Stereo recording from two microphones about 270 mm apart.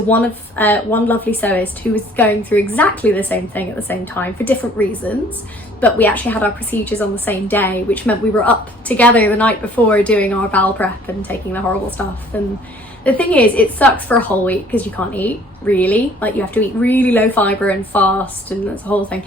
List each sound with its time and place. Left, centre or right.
0.1 s a woman's voice: centre